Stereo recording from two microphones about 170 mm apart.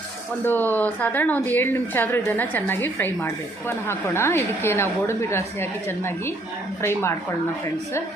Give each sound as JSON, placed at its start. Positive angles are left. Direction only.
{"t": 0.4, "sound": "a woman's voice", "side_deg": 10}